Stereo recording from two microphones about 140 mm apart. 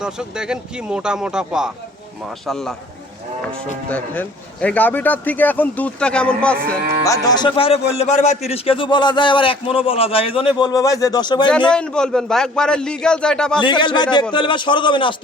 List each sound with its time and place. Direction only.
0.0 s a man's voice: 5° right (ahead or behind)
3.8 s speech: 10° left (ahead or behind)
7.0 s music: 25° left (ahead or behind); by 8.4 s 55° left (ahead or behind)
8.4 s a man's voice: 45° left (ahead or behind)
11.7 s a man's voice: 5° left (ahead or behind)
13.6 s a man's voice: 35° left (ahead or behind)